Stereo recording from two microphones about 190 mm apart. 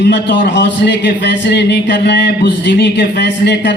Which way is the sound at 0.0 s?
65° left (ahead or behind).